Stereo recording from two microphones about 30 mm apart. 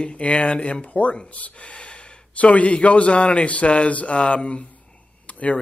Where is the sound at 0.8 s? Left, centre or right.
Left.